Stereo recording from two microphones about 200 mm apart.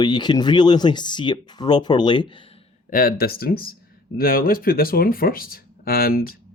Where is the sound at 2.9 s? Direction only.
45° left (ahead or behind).